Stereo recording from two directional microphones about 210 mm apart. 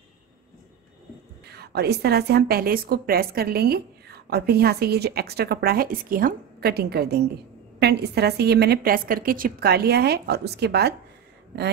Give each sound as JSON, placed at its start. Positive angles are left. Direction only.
{"t": 1.4, "sound": "a woman's voice", "side_deg": -50}